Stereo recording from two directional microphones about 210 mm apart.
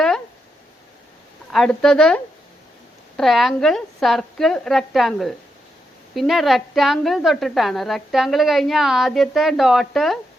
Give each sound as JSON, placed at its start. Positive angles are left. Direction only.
{"t": 1.5, "sound": "a woman's voice", "side_deg": 0}